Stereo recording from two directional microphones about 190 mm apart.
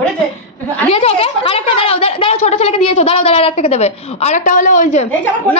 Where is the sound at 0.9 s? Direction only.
30° left (ahead or behind).